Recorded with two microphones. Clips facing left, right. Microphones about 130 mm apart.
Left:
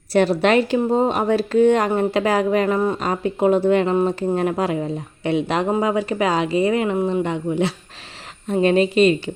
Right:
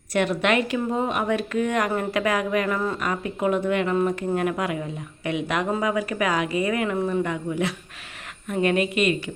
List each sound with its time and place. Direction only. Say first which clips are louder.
0.1 s speech: left 6 dB; 30° left (ahead or behind)